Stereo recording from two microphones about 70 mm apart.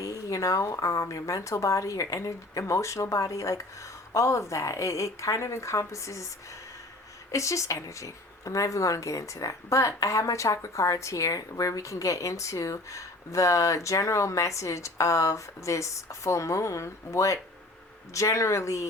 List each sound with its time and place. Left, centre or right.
0.0 s speech: left
7.3 s speech: left